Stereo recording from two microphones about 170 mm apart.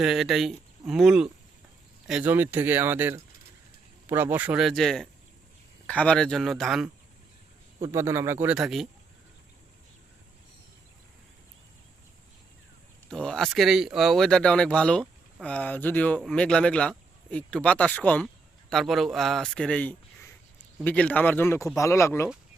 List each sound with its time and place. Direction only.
0.0 s speech: centre (ahead or behind)
7.8 s speech: 15° right (ahead or behind)
8.5 s speech: centre (ahead or behind)
13.1 s speech: 5° left (ahead or behind)